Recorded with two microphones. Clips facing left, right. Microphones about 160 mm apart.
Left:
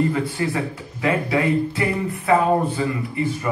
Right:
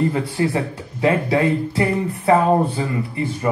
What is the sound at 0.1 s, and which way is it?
A man's voice, 30° right (ahead or behind).